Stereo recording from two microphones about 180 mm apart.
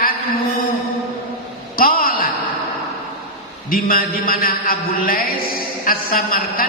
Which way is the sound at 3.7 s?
50° left (ahead or behind).